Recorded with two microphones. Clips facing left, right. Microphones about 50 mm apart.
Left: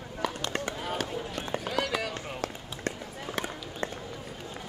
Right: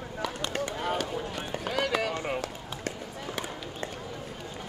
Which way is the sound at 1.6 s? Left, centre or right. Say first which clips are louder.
Right 4 dB; centre.